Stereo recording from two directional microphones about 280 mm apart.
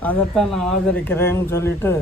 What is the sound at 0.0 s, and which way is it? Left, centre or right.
Speech, centre.